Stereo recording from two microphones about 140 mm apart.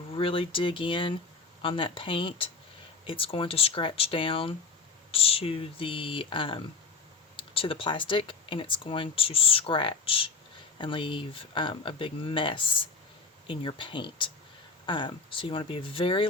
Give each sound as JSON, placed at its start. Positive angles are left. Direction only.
{"t": 0.1, "sound": "speech", "side_deg": 40}